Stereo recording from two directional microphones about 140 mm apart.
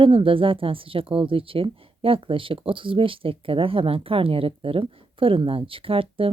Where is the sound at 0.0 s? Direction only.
40° right (ahead or behind).